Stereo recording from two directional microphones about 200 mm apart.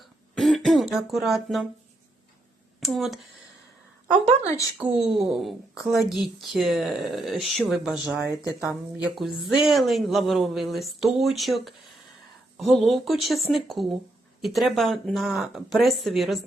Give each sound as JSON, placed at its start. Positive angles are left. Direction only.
{"t": 0.0, "sound": "throat clearing", "side_deg": 0}
{"t": 2.8, "sound": "speech", "side_deg": 0}
{"t": 4.8, "sound": "speech", "side_deg": -5}
{"t": 8.4, "sound": "speech", "side_deg": 15}
{"t": 9.1, "sound": "speech", "side_deg": 0}